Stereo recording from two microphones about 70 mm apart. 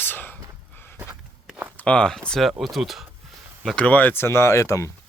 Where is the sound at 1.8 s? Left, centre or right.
Centre.